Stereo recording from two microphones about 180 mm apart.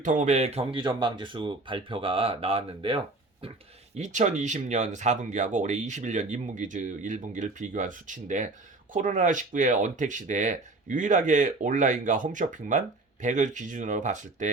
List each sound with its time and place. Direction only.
0.0 s speech: 45° right (ahead or behind)
3.9 s speech: 40° right (ahead or behind)